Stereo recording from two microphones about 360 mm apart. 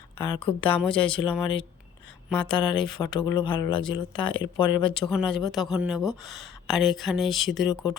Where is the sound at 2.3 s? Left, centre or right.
Centre.